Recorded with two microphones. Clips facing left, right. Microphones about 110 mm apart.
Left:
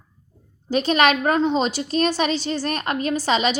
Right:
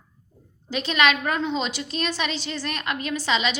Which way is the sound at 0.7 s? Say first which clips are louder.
Left 4 dB; 45° left (ahead or behind).